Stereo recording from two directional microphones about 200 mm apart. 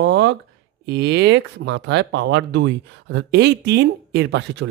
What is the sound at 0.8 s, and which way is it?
Speech, 60° right (ahead or behind).